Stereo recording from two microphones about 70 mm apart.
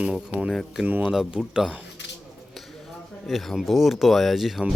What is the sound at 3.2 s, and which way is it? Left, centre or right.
Speech, centre.